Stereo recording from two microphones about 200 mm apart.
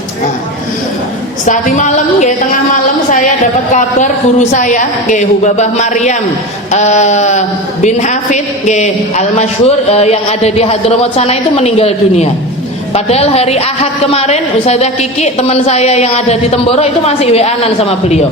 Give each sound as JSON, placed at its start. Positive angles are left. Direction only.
{"t": 1.5, "sound": "a man's voice", "side_deg": 40}
{"t": 3.7, "sound": "a man's voice", "side_deg": 40}